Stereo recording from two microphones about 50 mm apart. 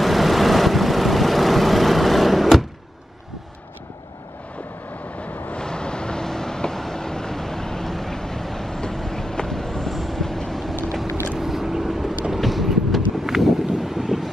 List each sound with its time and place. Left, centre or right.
0.0 s vehicle: centre
5.2 s vehicle: left
5.6 s vehicle: centre
11.3 s vehicle: centre